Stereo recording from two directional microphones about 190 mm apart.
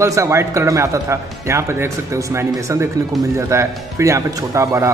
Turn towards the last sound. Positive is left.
turn(degrees=-15)  # may be behind; listen again after turning